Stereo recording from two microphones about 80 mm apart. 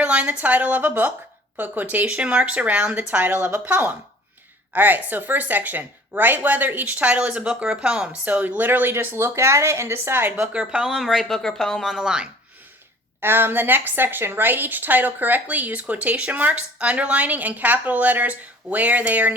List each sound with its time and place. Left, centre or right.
0.0 s a woman's voice: centre
10.5 s speech: centre
13.2 s a woman's voice: right